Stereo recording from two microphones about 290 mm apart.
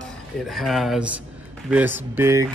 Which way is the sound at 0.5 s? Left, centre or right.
Centre.